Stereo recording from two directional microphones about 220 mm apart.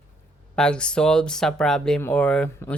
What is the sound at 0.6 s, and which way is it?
Speech, 5° left (ahead or behind).